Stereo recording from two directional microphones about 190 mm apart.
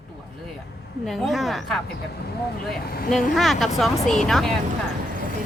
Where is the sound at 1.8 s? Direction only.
55° left (ahead or behind).